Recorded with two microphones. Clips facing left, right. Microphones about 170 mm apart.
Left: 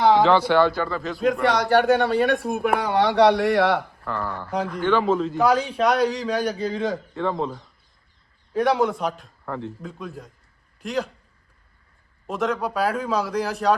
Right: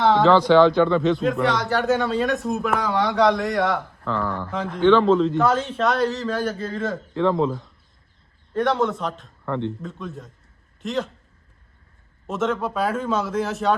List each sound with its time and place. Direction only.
0.3 s a man's voice: 10° left (ahead or behind)
1.7 s speech: 65° left (ahead or behind)
4.0 s a man's voice: 10° left (ahead or behind)
12.3 s a man's voice: centre (ahead or behind)